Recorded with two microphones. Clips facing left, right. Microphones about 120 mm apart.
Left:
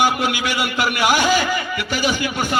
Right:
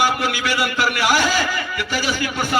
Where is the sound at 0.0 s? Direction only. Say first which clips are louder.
Left 1 dB; 20° left (ahead or behind).